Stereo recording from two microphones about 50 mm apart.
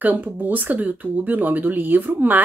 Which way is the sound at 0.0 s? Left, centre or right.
Right.